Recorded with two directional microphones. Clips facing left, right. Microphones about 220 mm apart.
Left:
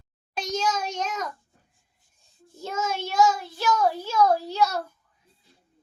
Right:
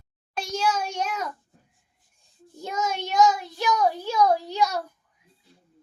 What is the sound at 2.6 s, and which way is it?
Child singing, 15° right (ahead or behind).